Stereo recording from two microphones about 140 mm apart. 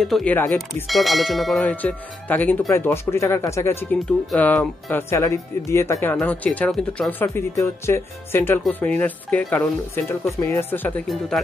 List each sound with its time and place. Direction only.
0.0 s speech: 5° left (ahead or behind)
5.1 s speech: 20° left (ahead or behind)
11.1 s speech: centre (ahead or behind)